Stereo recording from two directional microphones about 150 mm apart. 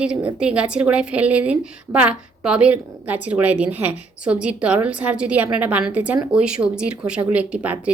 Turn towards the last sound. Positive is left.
turn(degrees=-10)  # may be behind; listen again after turning